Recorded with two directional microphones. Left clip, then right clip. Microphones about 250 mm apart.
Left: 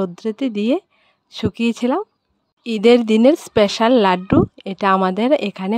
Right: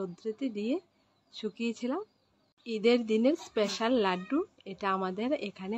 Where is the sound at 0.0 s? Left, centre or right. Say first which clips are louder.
Left 13 dB; left.